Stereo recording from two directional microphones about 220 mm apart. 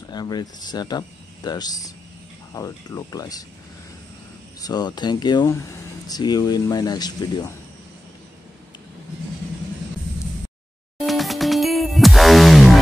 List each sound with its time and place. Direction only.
0.1 s speech: 20° left (ahead or behind)
4.6 s speech: 15° left (ahead or behind)
11.1 s music: centre (ahead or behind)